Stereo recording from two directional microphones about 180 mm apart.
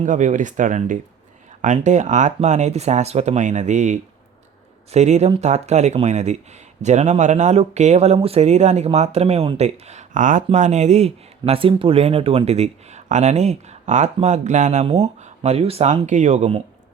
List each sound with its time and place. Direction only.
0.0 s speech: 45° right (ahead or behind)